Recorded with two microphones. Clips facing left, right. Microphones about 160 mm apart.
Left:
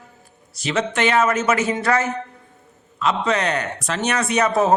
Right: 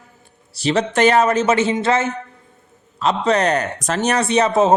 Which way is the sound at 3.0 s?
35° right (ahead or behind).